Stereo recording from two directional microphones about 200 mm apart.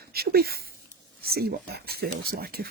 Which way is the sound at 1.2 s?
50° right (ahead or behind).